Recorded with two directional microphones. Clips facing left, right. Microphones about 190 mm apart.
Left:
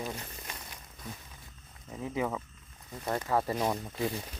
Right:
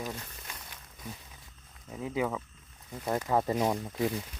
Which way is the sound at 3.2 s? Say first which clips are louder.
Right 2 dB; 15° right (ahead or behind).